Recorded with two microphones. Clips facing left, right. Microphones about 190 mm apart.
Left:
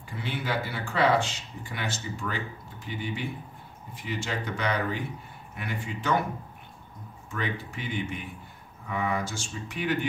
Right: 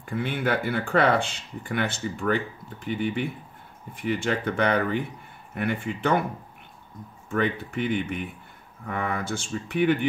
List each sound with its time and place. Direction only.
0.0 s speech: 55° right (ahead or behind)
7.2 s speech: 60° right (ahead or behind)